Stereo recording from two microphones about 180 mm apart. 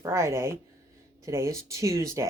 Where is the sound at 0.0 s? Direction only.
15° right (ahead or behind).